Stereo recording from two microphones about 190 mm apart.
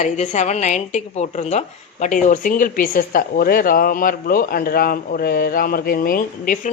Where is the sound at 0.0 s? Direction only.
40° left (ahead or behind).